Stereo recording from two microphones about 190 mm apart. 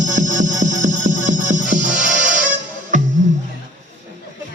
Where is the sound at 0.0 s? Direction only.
40° right (ahead or behind).